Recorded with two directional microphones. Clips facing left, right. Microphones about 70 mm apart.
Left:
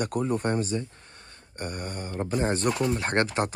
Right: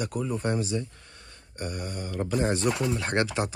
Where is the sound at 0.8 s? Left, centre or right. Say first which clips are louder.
Even; left.